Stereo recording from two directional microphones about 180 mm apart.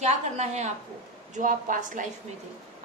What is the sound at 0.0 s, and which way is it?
A woman's voice, 40° right (ahead or behind).